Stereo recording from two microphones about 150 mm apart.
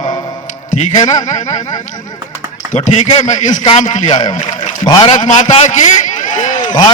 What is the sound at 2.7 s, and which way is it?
A man's voice, 55° left (ahead or behind).